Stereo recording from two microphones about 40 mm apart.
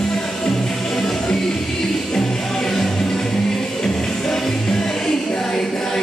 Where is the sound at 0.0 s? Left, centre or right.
Centre.